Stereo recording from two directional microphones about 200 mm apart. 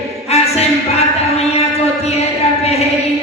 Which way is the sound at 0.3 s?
30° left (ahead or behind).